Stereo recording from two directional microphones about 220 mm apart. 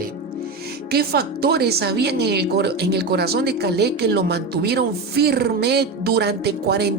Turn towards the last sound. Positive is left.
turn(degrees=-45)  # may be behind; listen again after turning